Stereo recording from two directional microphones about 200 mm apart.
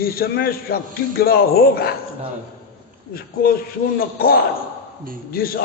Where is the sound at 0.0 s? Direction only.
50° left (ahead or behind).